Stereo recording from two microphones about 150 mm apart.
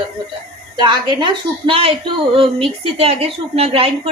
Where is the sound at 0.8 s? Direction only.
30° right (ahead or behind).